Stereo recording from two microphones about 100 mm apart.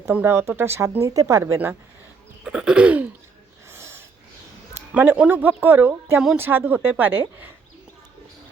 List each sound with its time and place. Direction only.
0.1 s speech: 20° right (ahead or behind)
2.4 s speech: 10° right (ahead or behind)
3.7 s snort: 25° right (ahead or behind)
4.9 s speech: 15° right (ahead or behind)